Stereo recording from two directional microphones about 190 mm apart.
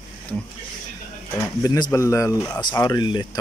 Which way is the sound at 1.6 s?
20° left (ahead or behind).